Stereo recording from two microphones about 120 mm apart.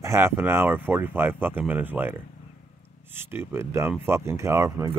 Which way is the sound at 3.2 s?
20° right (ahead or behind).